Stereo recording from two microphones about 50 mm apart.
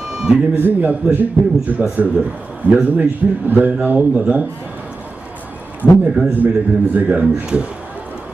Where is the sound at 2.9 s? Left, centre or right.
Right.